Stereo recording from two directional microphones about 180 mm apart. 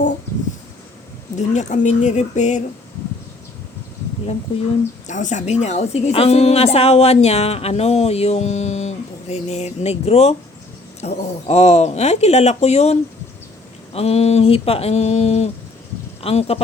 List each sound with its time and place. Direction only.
1.4 s a woman's voice: 40° left (ahead or behind)
5.0 s a woman's voice: 45° left (ahead or behind)